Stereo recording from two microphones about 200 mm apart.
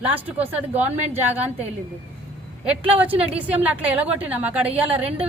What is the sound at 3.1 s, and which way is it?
Speech, 30° right (ahead or behind).